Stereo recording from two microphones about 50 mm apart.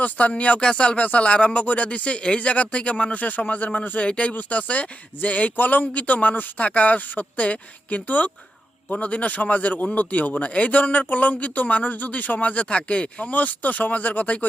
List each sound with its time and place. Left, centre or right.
0.0 s a man's voice: left